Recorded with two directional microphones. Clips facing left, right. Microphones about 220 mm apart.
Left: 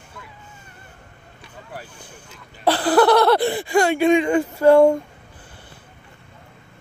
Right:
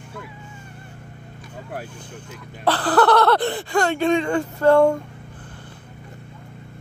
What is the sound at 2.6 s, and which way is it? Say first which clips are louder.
Speech: left 2 dB; 10° left (ahead or behind).